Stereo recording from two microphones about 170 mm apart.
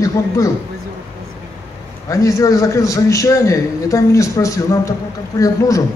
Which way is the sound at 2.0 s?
20° left (ahead or behind).